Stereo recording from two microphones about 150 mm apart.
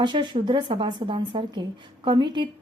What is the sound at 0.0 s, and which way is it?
A woman's voice, 30° right (ahead or behind).